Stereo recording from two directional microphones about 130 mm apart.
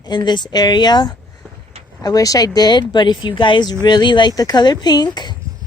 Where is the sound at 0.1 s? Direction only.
35° left (ahead or behind).